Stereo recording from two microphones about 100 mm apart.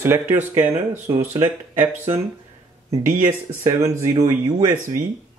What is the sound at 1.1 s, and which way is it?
Speech, 45° right (ahead or behind).